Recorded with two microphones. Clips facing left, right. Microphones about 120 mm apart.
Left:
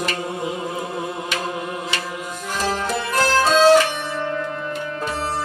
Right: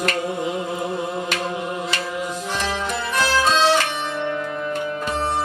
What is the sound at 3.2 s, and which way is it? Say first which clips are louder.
Music: left 4 dB; 45° left (ahead or behind).